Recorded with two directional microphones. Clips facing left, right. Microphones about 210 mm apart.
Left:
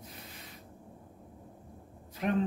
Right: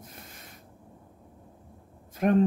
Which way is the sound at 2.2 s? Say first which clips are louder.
Right 7 dB; 50° right (ahead or behind).